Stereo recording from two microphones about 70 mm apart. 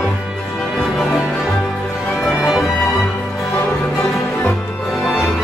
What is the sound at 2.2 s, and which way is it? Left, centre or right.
Music, centre.